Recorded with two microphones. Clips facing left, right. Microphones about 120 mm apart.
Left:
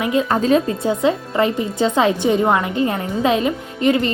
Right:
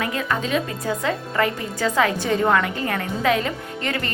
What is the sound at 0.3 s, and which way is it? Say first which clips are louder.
Speech: left 7 dB; 35° left (ahead or behind).